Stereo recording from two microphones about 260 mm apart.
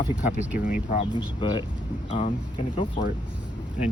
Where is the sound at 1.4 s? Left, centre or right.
Centre.